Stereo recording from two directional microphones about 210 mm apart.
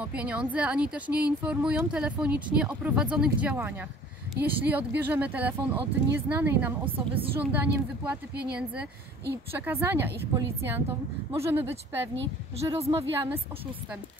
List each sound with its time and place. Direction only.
0.0 s speech: 5° right (ahead or behind)
12.7 s a woman's voice: 30° right (ahead or behind)
13.1 s speech: 10° right (ahead or behind)